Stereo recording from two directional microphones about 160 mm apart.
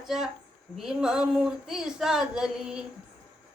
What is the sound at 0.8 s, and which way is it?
Child singing, 5° right (ahead or behind).